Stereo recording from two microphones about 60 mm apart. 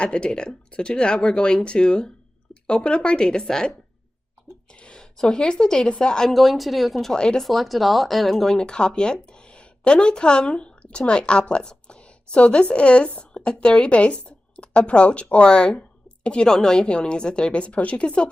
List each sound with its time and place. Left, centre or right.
0.0 s a woman's voice: centre
6.3 s speech: centre
7.2 s a woman's voice: centre
7.4 s a woman's voice: centre